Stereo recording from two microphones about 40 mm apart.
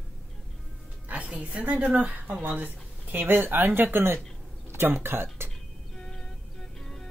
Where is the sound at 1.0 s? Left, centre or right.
Right.